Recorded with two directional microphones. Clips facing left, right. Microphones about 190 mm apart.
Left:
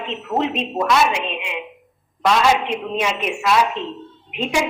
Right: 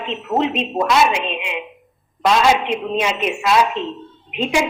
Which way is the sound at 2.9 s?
20° right (ahead or behind).